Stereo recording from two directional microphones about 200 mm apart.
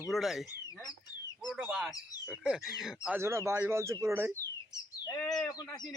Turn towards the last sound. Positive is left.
turn(degrees=20)  # may be behind; listen again after turning